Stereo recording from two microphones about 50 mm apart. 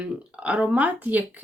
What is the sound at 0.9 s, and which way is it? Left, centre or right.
Speech, right.